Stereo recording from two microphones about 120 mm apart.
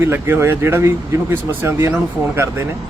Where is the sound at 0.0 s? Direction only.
20° right (ahead or behind).